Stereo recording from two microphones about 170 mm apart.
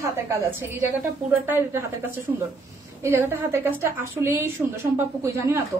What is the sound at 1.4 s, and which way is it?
A woman's voice, 10° right (ahead or behind).